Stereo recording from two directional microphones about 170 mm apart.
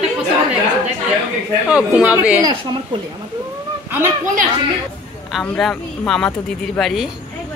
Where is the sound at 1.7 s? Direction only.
5° right (ahead or behind).